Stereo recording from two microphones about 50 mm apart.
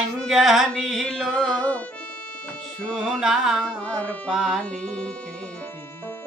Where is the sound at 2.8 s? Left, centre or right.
Centre.